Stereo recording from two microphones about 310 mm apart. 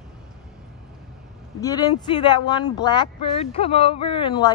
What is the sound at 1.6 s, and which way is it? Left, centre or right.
Speech, centre.